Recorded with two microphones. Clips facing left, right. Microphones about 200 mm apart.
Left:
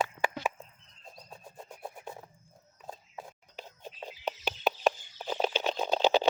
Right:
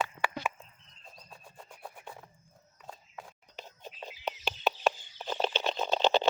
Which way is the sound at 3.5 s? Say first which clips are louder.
Even; 10° left (ahead or behind).